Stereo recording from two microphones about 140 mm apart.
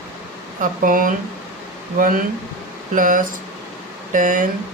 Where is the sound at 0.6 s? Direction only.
75° right (ahead or behind).